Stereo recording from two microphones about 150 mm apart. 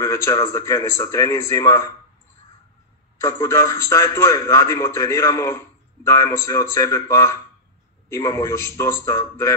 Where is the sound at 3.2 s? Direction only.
20° left (ahead or behind).